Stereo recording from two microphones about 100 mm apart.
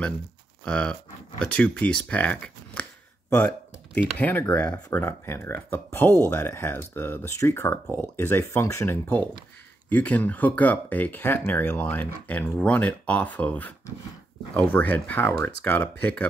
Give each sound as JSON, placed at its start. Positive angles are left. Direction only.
{"t": 0.7, "sound": "speech", "side_deg": 10}
{"t": 3.3, "sound": "a sound", "side_deg": 15}
{"t": 4.2, "sound": "speech", "side_deg": 15}